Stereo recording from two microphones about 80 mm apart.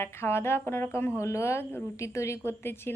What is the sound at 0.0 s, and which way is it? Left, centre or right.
A woman's voice, left.